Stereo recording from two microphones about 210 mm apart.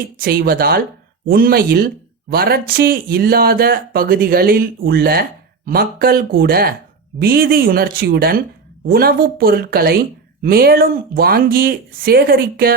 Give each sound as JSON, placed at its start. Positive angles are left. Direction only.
{"t": 0.2, "sound": "speech", "side_deg": -45}